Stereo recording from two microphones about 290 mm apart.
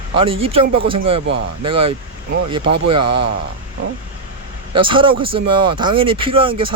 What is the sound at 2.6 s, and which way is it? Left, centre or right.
Speech, right.